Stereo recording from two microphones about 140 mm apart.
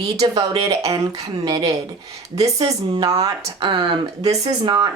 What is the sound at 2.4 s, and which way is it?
Speech, 45° right (ahead or behind).